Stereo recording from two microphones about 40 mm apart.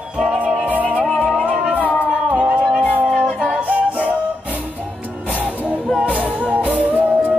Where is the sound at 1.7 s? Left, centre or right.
Right.